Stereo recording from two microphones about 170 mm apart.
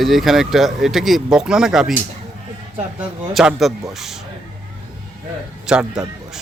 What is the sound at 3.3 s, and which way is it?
Speech, centre (ahead or behind).